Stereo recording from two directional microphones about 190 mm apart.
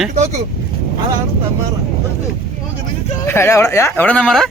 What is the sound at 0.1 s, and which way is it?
Speech, 40° right (ahead or behind).